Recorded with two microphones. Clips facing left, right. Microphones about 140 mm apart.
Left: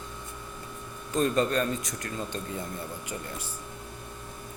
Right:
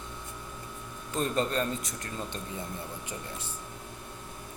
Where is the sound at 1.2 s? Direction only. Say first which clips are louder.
Left 3 dB; 25° right (ahead or behind).